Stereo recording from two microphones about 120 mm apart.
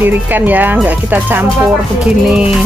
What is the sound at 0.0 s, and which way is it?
Speech, 15° right (ahead or behind).